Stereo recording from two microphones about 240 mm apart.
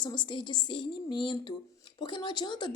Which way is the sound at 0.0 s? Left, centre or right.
Centre.